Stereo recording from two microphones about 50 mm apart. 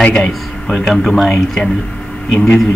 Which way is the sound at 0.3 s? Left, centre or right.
Centre.